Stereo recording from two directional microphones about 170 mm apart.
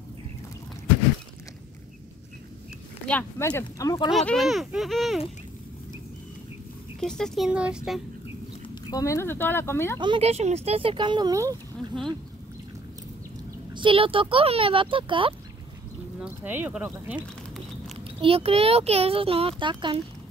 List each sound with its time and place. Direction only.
3.1 s speech: 10° left (ahead or behind)
3.4 s speech: 20° left (ahead or behind)
4.1 s speech: centre (ahead or behind)
7.0 s speech: 5° left (ahead or behind)
8.6 s speech: 20° left (ahead or behind)
9.9 s a child's voice: 30° right (ahead or behind)
13.7 s a child's voice: 30° right (ahead or behind)
16.2 s speech: 10° right (ahead or behind)
17.9 s a child's voice: 35° right (ahead or behind)